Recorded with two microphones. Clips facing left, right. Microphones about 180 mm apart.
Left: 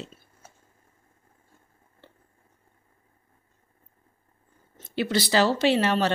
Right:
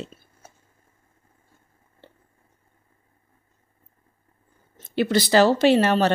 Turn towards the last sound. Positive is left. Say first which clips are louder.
# right 4 dB
turn(degrees=-45)  # may be behind; listen again after turning